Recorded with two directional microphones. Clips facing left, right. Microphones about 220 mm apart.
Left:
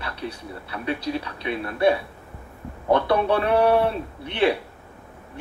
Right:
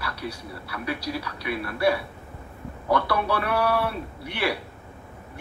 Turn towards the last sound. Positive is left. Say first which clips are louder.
# left 6 dB
turn(degrees=25)  # may be behind; listen again after turning